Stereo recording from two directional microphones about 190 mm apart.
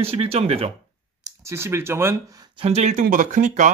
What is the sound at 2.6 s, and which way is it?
A man's voice, 35° right (ahead or behind).